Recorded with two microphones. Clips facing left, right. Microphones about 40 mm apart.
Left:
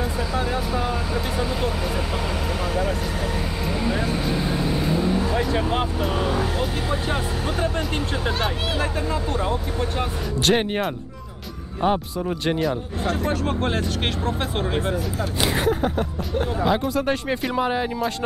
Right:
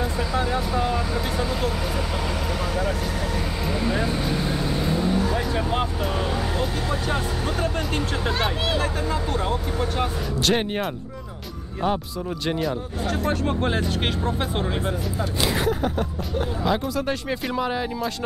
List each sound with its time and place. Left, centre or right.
0.0 s vehicle: centre
3.6 s vehicle: centre
8.3 s speech: centre
13.7 s speech: centre
14.6 s speech: centre